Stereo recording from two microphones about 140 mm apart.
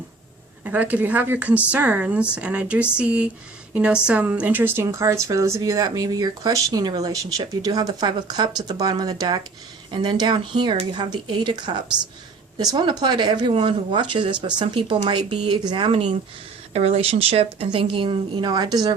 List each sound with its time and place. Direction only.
0.6 s a woman's voice: 10° right (ahead or behind); by 18.9 s 30° right (ahead or behind)